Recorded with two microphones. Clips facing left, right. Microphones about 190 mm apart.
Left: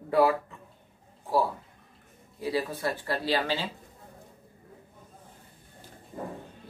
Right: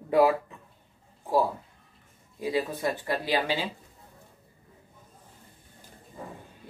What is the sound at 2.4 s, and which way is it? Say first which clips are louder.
Speech: right 1 dB; 15° right (ahead or behind).